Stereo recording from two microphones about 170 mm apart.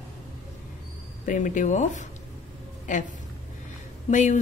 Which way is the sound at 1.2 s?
50° left (ahead or behind).